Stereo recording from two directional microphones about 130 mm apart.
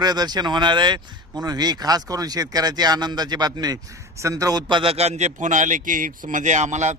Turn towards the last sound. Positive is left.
turn(degrees=-65)  # may be behind; listen again after turning